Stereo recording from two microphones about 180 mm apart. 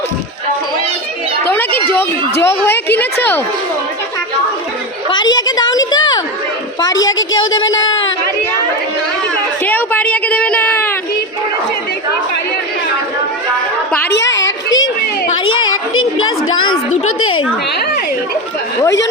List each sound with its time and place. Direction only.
1.5 s a sound: 10° left (ahead or behind)
2.4 s a woman's voice: 15° left (ahead or behind)
5.1 s a woman's voice: 25° left (ahead or behind)
7.1 s a woman's voice: 90° left
9.6 s a woman's voice: 10° left (ahead or behind)
14.1 s a sound: 85° left